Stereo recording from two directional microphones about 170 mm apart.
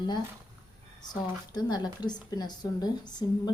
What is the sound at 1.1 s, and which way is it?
Speech, 25° left (ahead or behind).